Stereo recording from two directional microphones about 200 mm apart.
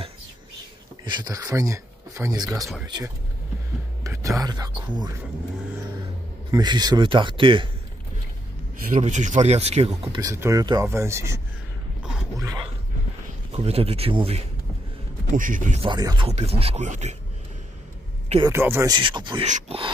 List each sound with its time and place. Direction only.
1.0 s speech: 20° right (ahead or behind)
4.0 s a sound: 15° right (ahead or behind)
4.4 s speech: 20° right (ahead or behind)
6.5 s speech: 20° right (ahead or behind)
8.8 s speech: 40° right (ahead or behind)
9.8 s speech: 15° right (ahead or behind)
13.5 s speech: 30° right (ahead or behind)
15.3 s speech: 40° right (ahead or behind)
15.8 s speech: 20° right (ahead or behind)
18.4 s speech: 10° right (ahead or behind); by 19.9 s 30° right (ahead or behind)